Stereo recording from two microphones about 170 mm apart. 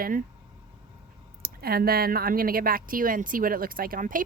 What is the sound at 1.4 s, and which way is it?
A woman's voice, 60° right (ahead or behind).